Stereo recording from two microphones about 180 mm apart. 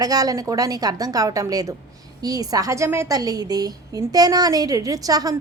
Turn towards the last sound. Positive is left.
turn(degrees=-20)  # may be behind; listen again after turning